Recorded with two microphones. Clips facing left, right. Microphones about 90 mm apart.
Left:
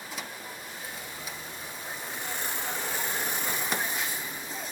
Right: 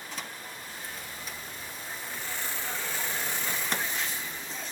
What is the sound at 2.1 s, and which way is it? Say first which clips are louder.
Vehicle: left 2 dB; 20° left (ahead or behind).